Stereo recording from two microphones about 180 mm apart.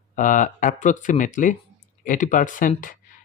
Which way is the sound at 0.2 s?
45° left (ahead or behind).